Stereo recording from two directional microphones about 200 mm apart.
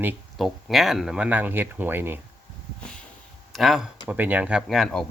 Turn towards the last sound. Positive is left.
turn(degrees=0)  # may be behind; listen again after turning